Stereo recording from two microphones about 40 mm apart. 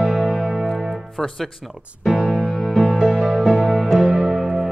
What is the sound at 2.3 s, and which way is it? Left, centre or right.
Music, centre.